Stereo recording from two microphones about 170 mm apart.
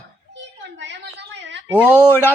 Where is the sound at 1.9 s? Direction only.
10° left (ahead or behind).